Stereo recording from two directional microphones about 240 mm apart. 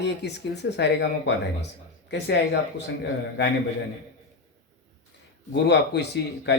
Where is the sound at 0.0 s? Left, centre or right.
Left.